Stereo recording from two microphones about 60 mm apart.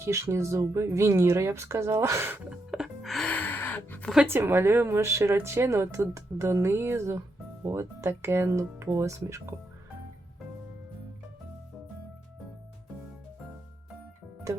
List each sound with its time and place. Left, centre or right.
0.0 s a woman's voice: right
2.5 s music: centre
3.2 s gasp: left
4.3 s a woman's voice: right